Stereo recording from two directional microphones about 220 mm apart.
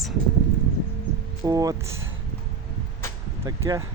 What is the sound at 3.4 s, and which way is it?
Speech, 15° right (ahead or behind).